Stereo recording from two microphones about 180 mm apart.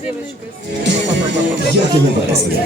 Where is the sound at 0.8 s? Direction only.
75° right (ahead or behind).